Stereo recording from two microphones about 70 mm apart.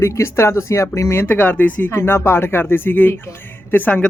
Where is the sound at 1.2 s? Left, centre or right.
Left.